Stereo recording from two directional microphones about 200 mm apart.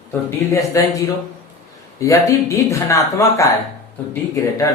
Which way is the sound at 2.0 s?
15° left (ahead or behind).